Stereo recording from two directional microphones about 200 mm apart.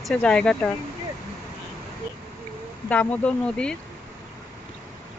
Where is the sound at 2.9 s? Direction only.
5° left (ahead or behind).